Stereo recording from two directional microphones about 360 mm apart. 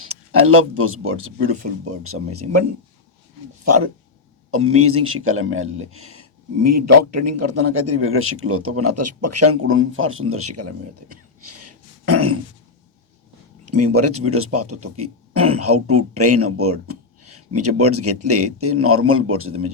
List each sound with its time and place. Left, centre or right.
0.0 s a man's voice: right
11.4 s cough: right
13.7 s a man's voice: right